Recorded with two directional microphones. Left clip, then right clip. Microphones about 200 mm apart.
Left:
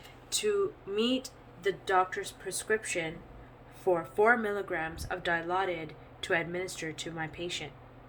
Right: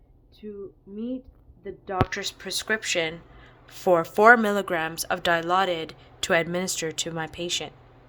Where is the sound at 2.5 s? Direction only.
50° right (ahead or behind).